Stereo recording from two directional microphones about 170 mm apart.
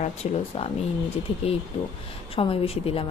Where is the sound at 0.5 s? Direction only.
30° left (ahead or behind).